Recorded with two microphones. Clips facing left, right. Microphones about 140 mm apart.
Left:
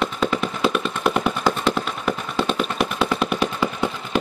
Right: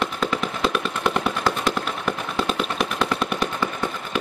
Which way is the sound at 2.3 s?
Centre (ahead or behind).